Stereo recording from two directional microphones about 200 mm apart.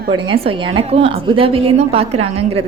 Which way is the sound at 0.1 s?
25° right (ahead or behind).